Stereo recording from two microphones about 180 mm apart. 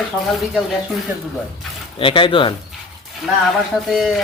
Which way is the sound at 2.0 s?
30° left (ahead or behind).